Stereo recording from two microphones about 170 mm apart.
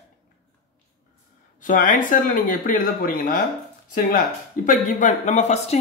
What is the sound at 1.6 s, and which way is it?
Speech, 50° left (ahead or behind).